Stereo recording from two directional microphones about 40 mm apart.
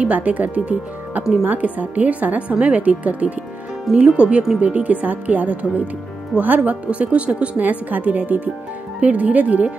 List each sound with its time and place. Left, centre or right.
0.0 s speech: right
3.9 s speech: right
7.6 s speech: right